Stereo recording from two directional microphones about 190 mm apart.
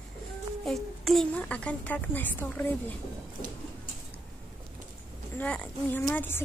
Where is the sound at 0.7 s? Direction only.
Centre (ahead or behind).